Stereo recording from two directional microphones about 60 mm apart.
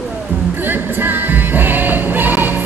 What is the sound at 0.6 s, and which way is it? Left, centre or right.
Music, right.